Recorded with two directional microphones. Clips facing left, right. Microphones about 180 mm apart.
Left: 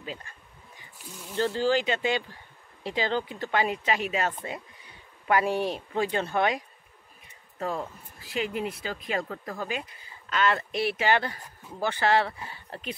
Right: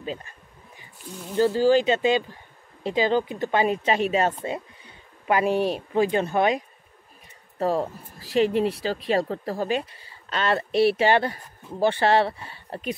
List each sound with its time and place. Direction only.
0.0 s speech: 25° right (ahead or behind)
1.3 s speech: 10° right (ahead or behind)
7.5 s speech: 35° right (ahead or behind)